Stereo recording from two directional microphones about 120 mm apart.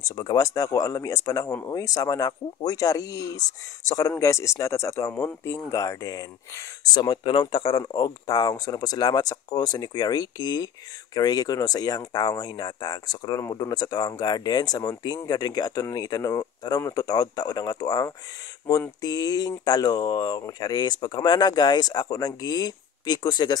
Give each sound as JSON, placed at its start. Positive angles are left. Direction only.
{"t": 0.1, "sound": "speech", "side_deg": 30}
{"t": 7.8, "sound": "speech", "side_deg": 30}